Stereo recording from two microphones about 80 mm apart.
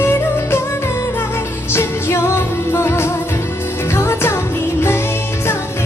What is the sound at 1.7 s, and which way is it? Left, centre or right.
Music, left.